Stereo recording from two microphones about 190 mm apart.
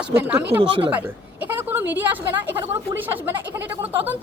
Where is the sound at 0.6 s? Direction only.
25° right (ahead or behind).